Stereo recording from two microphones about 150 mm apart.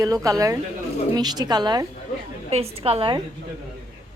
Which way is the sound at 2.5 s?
40° right (ahead or behind).